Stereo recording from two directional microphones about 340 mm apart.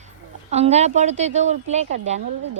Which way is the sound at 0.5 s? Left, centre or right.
Centre.